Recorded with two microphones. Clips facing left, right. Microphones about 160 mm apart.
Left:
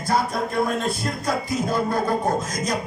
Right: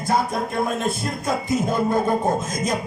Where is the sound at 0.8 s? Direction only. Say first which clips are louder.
Right 1 dB; 20° right (ahead or behind).